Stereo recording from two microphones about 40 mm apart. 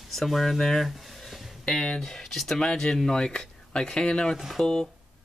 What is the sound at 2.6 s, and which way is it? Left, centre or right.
Speech, centre.